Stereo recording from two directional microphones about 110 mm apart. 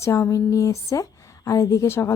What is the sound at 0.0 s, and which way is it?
Speech, 25° left (ahead or behind).